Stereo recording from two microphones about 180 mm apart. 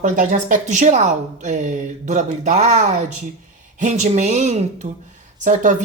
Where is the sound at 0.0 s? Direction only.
45° right (ahead or behind).